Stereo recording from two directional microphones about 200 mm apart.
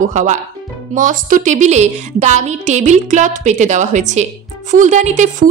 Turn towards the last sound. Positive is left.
turn(degrees=-35)  # may be behind; listen again after turning